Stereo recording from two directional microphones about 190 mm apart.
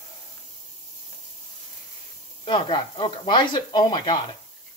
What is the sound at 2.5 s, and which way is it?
Speech, 25° left (ahead or behind).